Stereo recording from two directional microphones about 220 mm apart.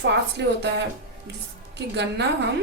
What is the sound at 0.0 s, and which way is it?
Speech, 50° right (ahead or behind).